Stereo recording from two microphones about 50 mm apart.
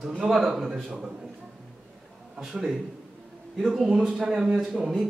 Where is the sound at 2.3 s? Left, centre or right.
Centre.